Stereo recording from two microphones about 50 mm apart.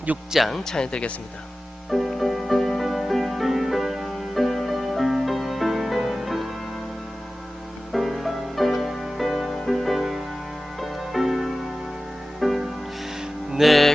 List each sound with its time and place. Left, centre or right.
0.3 s a man's voice: centre
0.6 s speech: centre
1.9 s music: centre
7.9 s music: centre